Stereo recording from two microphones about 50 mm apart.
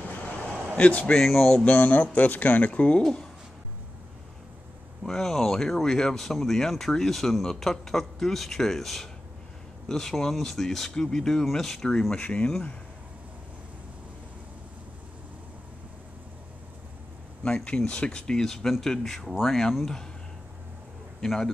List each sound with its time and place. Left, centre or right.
0.0 s a sound: left
0.7 s a man's voice: left
1.1 s speech: centre
1.6 s speech: left
5.0 s speech: centre; by 12.4 s left
17.4 s speech: centre
21.2 s speech: centre